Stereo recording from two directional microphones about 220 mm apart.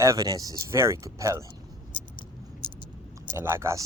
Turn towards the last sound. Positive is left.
turn(degrees=-15)  # may be behind; listen again after turning